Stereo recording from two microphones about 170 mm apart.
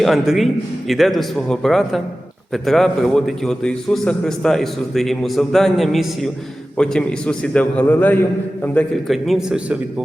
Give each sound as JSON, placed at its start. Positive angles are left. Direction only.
{"t": 0.0, "sound": "a man's voice", "side_deg": 0}